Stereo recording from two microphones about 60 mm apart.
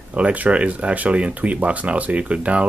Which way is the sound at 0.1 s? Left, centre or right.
Right.